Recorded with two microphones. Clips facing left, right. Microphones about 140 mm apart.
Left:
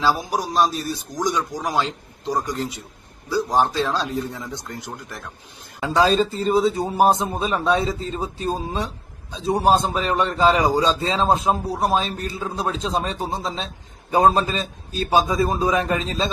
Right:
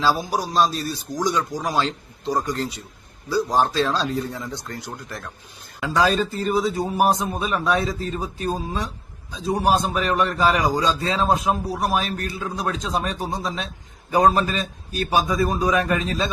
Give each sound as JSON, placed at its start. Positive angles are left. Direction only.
{"t": 0.0, "sound": "speech", "side_deg": 15}
{"t": 5.8, "sound": "speech", "side_deg": 25}